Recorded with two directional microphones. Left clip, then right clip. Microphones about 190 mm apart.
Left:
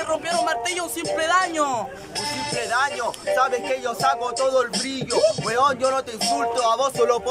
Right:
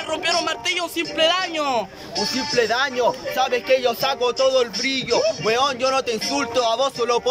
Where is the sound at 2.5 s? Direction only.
25° right (ahead or behind).